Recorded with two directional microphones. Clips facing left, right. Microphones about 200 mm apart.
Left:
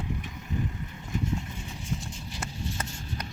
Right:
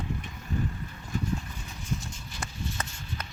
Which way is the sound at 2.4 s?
35° left (ahead or behind).